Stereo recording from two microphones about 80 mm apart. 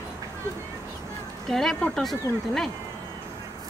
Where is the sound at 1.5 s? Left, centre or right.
Centre.